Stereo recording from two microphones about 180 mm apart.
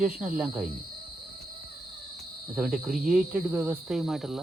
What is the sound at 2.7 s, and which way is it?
Speech, centre (ahead or behind).